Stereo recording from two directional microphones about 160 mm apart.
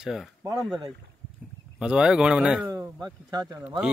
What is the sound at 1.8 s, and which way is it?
Speech, 5° right (ahead or behind).